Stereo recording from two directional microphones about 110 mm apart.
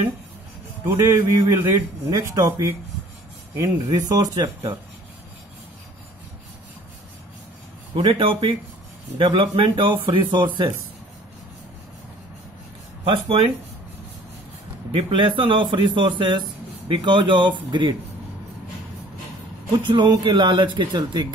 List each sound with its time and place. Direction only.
0.8 s a man's voice: 25° right (ahead or behind)
8.0 s a man's voice: 50° right (ahead or behind)
13.0 s a man's voice: 60° right (ahead or behind)
14.9 s speech: 60° right (ahead or behind)
19.7 s a man's voice: 40° right (ahead or behind)